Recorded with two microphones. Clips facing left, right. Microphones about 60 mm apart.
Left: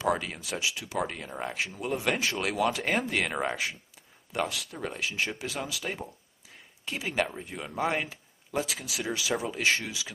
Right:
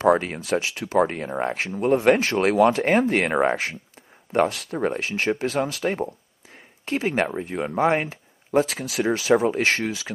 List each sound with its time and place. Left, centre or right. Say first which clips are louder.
0.0 s speech: right 9 dB; right